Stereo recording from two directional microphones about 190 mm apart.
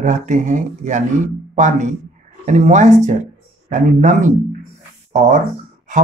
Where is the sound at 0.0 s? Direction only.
40° right (ahead or behind).